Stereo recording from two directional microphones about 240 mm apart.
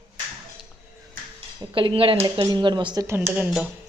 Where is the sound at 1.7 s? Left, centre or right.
Right; by 3.7 s centre.